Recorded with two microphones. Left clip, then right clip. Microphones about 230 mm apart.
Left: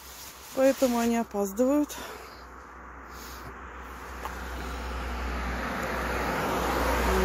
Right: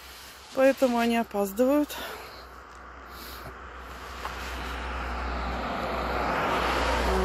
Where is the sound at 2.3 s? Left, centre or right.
Left.